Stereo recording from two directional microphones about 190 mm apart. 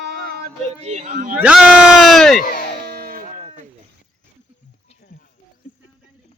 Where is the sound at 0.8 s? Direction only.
40° right (ahead or behind).